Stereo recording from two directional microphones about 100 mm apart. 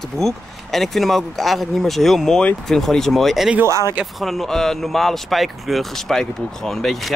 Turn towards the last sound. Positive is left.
turn(degrees=0)  # may be behind; listen again after turning